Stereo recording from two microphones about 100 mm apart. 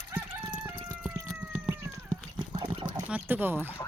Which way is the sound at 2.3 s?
45° right (ahead or behind).